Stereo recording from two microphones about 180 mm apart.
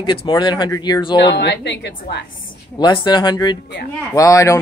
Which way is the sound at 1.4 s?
75° left (ahead or behind).